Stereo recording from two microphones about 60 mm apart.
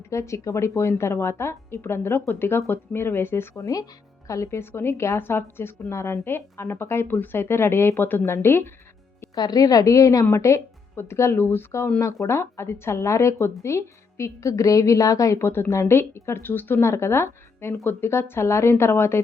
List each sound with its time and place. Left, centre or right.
0.1 s a woman's voice: left
3.5 s a woman's voice: left
4.3 s speech: left
4.6 s a woman's voice: left
7.1 s speech: left
9.5 s a woman's voice: left
10.3 s speech: left
10.9 s speech: left
15.4 s speech: left
16.4 s a woman's voice: left
16.8 s speech: left